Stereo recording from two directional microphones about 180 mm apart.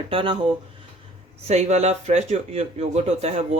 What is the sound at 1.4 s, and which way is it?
Speech, 40° right (ahead or behind).